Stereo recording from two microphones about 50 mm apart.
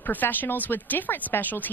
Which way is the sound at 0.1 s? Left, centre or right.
Left.